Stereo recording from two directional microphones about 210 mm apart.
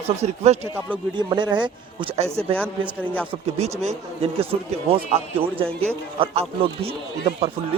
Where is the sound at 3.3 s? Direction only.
30° right (ahead or behind).